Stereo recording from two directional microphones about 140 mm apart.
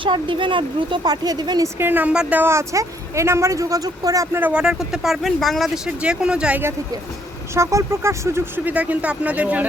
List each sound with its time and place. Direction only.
0.0 s a woman's voice: 35° right (ahead or behind)
1.8 s a woman's voice: 15° right (ahead or behind)